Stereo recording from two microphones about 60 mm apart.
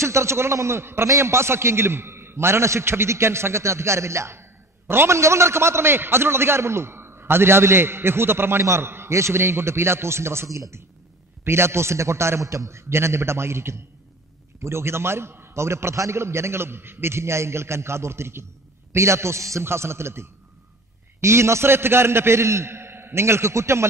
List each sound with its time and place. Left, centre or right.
0.0 s a man's voice: right